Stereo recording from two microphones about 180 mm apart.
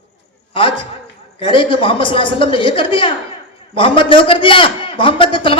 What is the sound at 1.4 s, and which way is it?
A man's voice, 30° left (ahead or behind).